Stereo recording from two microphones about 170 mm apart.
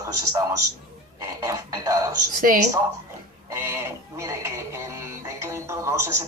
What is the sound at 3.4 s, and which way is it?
Music, 15° right (ahead or behind).